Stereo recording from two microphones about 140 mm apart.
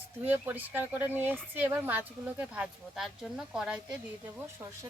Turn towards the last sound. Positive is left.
turn(degrees=-20)  # may be behind; listen again after turning